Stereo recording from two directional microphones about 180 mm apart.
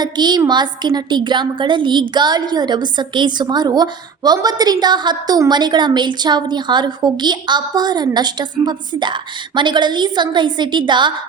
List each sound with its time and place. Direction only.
0.0 s a woman's voice: 25° right (ahead or behind)